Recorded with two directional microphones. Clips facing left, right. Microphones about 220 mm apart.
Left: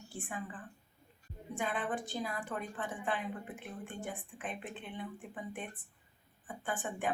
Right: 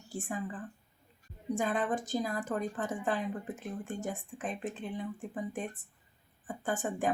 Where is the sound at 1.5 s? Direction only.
40° right (ahead or behind).